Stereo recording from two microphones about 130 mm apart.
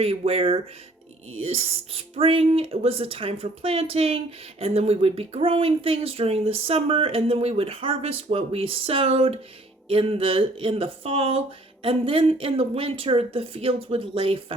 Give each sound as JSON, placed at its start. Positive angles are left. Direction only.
{"t": 0.0, "sound": "speech", "side_deg": -50}